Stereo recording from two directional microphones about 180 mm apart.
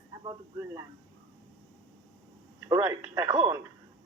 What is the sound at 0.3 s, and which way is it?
Speech, 15° right (ahead or behind).